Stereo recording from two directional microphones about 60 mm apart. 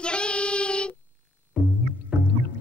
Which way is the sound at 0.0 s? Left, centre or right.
Centre.